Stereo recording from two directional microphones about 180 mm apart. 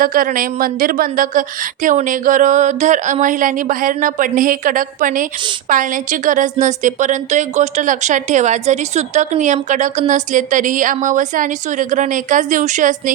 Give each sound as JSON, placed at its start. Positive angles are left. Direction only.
{"t": 0.0, "sound": "speech", "side_deg": -50}